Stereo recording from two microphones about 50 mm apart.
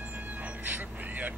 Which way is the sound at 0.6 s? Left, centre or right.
Right.